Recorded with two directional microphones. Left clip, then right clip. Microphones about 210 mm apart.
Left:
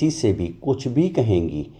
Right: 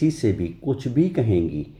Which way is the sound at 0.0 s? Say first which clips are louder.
Left 1 dB; 10° left (ahead or behind).